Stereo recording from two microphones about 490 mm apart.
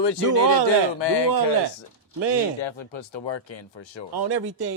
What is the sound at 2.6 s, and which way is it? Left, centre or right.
Speech, left.